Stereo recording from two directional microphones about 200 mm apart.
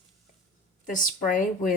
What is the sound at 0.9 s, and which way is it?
Speech, 40° left (ahead or behind).